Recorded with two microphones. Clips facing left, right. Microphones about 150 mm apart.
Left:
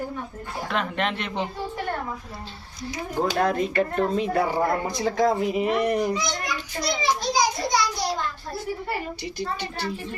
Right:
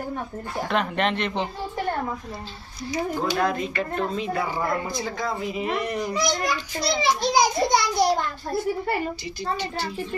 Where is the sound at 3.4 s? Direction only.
50° left (ahead or behind).